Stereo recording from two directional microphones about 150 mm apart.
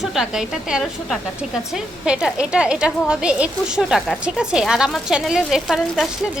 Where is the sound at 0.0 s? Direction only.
Centre (ahead or behind).